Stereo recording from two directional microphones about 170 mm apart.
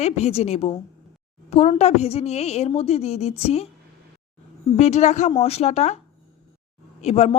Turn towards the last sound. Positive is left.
turn(degrees=40)  # may be behind; listen again after turning